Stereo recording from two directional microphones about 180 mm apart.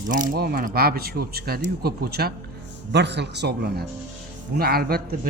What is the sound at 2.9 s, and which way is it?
Speech, 70° right (ahead or behind).